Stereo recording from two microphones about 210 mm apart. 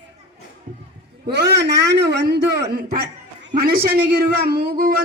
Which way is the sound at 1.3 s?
50° right (ahead or behind).